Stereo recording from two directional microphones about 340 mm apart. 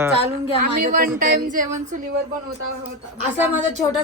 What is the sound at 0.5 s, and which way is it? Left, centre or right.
Speech, right.